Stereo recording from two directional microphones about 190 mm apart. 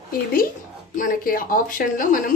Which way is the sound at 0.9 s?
45° left (ahead or behind).